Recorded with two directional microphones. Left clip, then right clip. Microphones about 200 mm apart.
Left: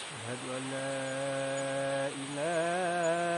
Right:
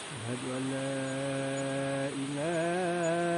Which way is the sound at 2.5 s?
35° left (ahead or behind).